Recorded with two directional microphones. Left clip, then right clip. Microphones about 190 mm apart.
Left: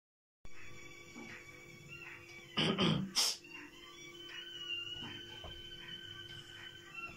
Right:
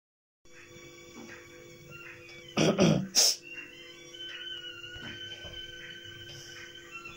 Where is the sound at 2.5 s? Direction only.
20° right (ahead or behind).